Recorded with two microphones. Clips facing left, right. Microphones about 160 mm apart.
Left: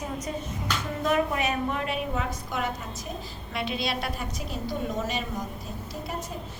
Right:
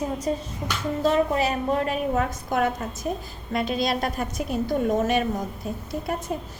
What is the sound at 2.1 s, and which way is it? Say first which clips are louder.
A woman's voice: right 6 dB; 50° right (ahead or behind).